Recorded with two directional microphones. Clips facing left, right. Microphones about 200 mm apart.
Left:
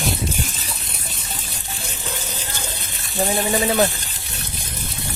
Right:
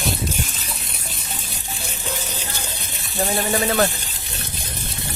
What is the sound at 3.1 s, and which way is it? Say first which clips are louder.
Speech: left 1 dB; 15° left (ahead or behind).